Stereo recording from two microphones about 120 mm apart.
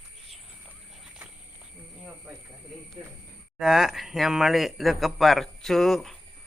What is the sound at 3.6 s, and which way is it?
Speech, 5° right (ahead or behind).